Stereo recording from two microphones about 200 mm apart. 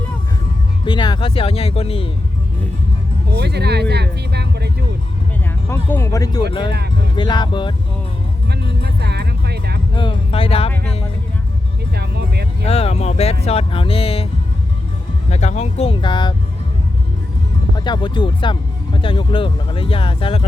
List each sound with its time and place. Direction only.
0.9 s speech: 25° left (ahead or behind)
3.3 s speech: 55° right (ahead or behind)
5.7 s speech: 10° left (ahead or behind)
8.8 s music: 55° right (ahead or behind)
9.9 s music: 25° left (ahead or behind)
11.9 s music: 55° right (ahead or behind)
12.6 s speech: 30° left (ahead or behind)
15.3 s speech: 35° left (ahead or behind)
17.7 s speech: 20° left (ahead or behind)